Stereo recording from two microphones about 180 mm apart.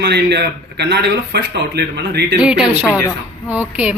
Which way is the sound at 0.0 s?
65° right (ahead or behind).